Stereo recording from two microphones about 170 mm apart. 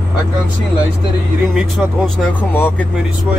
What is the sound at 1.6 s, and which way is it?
Speech, 5° left (ahead or behind).